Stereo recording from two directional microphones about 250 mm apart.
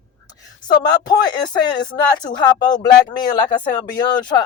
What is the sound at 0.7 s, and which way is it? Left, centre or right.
Speech, centre.